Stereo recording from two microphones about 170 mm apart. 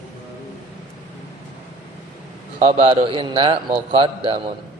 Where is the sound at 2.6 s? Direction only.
30° right (ahead or behind).